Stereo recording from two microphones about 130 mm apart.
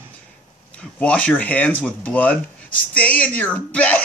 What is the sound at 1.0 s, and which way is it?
Speech, 10° left (ahead or behind).